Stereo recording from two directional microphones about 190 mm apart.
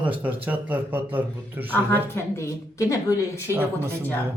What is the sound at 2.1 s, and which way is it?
A woman's voice, 15° left (ahead or behind).